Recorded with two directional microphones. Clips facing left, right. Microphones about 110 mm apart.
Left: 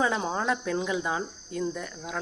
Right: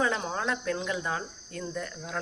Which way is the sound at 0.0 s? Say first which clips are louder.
Left 2 dB; 15° left (ahead or behind).